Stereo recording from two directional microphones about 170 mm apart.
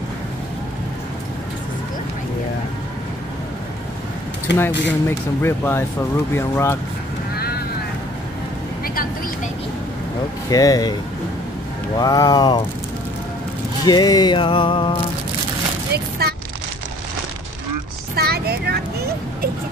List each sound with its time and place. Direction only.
4.5 s speech: 90° left
5.0 s speech: 15° left (ahead or behind)
10.5 s music: 20° left (ahead or behind)
12.0 s music: 20° left (ahead or behind)
13.8 s music: 25° left (ahead or behind)
15.9 s a sound: 70° right (ahead or behind)
18.1 s a sound: 70° right (ahead or behind)